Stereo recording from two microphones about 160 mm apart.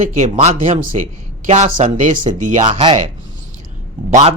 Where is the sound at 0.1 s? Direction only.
50° right (ahead or behind).